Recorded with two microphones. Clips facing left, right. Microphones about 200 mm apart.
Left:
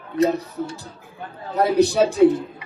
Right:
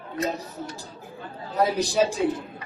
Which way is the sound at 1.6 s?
60° left (ahead or behind).